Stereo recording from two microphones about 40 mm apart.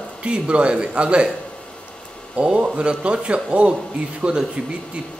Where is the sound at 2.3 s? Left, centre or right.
Right.